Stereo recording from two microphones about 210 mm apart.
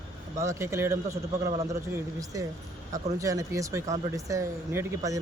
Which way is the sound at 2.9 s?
15° right (ahead or behind).